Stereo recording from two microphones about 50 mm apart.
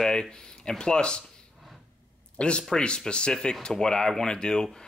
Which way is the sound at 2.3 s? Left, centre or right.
Centre.